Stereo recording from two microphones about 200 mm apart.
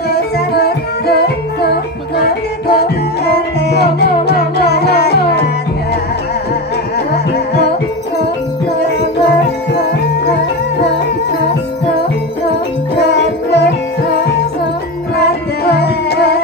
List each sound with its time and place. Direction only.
0.1 s music: 55° left (ahead or behind)
7.1 s music: 55° left (ahead or behind)
12.9 s music: 60° left (ahead or behind)
15.1 s music: 55° left (ahead or behind)